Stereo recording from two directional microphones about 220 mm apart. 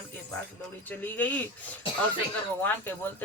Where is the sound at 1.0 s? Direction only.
10° left (ahead or behind).